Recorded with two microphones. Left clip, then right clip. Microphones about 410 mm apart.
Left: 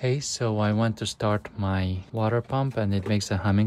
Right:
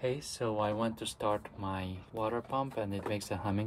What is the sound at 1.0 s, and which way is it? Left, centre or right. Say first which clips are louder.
Speech: left 6 dB; left.